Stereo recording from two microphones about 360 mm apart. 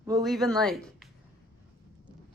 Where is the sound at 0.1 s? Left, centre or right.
Centre.